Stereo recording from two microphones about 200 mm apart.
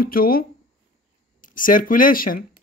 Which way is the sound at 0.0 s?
45° left (ahead or behind).